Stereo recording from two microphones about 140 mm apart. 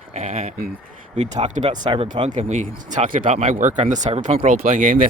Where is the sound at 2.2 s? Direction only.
60° right (ahead or behind).